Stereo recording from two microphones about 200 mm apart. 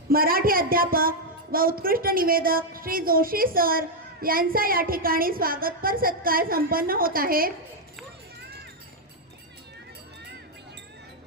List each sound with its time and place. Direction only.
0.1 s a woman's voice: 45° right (ahead or behind)